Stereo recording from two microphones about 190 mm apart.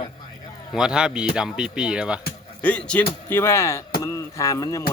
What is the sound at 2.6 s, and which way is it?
Speech, 5° left (ahead or behind).